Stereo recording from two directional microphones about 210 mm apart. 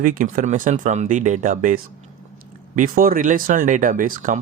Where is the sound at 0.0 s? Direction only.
40° right (ahead or behind).